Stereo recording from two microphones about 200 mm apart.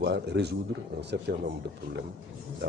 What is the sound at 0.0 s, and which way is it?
Speech, 55° right (ahead or behind).